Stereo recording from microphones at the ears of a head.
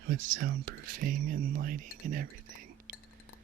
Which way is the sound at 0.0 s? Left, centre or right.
Right.